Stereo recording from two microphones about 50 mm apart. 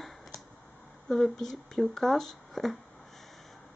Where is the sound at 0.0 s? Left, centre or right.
Centre.